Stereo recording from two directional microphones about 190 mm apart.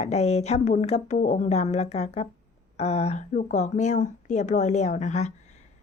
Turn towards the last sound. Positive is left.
turn(degrees=35)  # may be behind; listen again after turning